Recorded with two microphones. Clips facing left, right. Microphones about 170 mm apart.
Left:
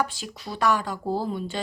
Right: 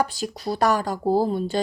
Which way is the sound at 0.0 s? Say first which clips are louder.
Right 4 dB; 40° right (ahead or behind).